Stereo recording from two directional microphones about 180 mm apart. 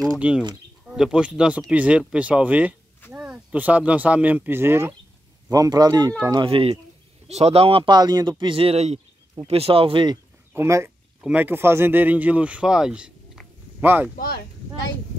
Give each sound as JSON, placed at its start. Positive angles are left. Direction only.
{"t": 0.2, "sound": "speech", "side_deg": -5}
{"t": 10.5, "sound": "speech", "side_deg": -15}
{"t": 14.1, "sound": "speech", "side_deg": 55}